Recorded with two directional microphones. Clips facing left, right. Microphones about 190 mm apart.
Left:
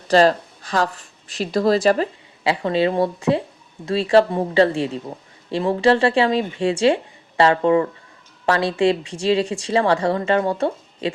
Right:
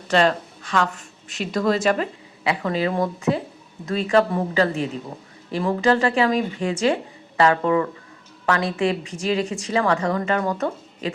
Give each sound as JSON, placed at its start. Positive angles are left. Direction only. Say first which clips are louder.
{"t": 0.1, "sound": "a woman's voice", "louder": "left 4 dB", "side_deg": 35}